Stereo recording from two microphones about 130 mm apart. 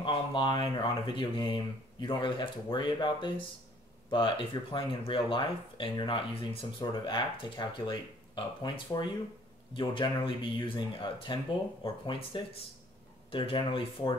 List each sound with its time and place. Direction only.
0.0 s speech: 40° left (ahead or behind)